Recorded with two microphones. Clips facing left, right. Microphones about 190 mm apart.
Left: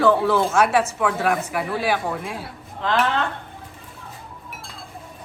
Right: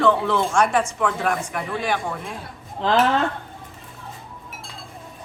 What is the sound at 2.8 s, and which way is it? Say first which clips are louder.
Speech: right 3 dB; 35° right (ahead or behind).